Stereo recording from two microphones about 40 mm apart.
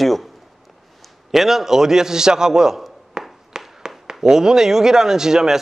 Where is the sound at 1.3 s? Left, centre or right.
Centre.